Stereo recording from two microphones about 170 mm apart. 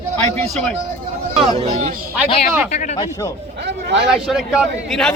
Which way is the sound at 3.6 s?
80° right.